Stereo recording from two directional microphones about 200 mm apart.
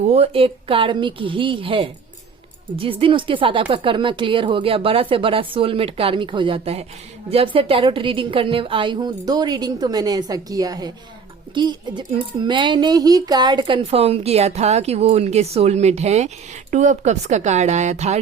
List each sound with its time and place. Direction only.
0.0 s speech: 30° right (ahead or behind)